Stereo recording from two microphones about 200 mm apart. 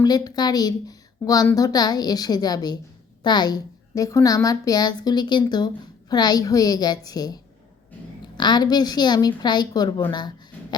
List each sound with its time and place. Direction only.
0.0 s a woman's voice: 20° left (ahead or behind)